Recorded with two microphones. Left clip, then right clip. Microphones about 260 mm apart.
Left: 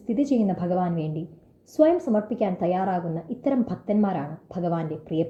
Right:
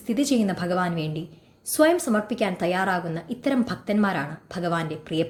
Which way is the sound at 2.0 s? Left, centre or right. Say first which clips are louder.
Even; right.